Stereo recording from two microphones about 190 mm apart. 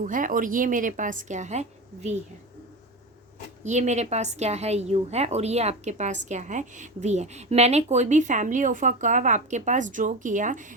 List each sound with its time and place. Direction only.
0.0 s a woman's voice: 45° right (ahead or behind)
3.6 s a woman's voice: 35° right (ahead or behind)